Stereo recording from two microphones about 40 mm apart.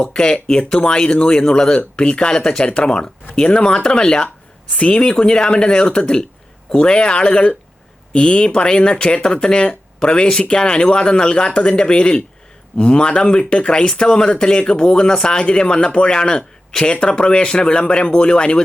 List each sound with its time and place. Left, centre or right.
0.0 s speech: left
4.7 s speech: left
5.1 s speech: centre